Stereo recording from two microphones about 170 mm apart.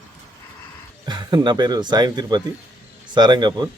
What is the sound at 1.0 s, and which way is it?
Speech, 25° right (ahead or behind).